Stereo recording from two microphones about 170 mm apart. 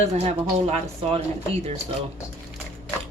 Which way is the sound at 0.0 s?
40° right (ahead or behind).